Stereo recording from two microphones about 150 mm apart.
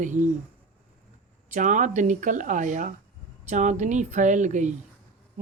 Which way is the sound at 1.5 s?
55° right (ahead or behind).